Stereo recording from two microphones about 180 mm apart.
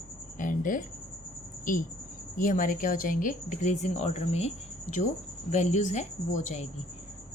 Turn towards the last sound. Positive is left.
turn(degrees=40)  # may be behind; listen again after turning